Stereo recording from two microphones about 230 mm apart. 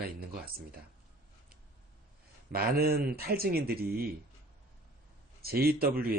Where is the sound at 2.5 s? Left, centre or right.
Right.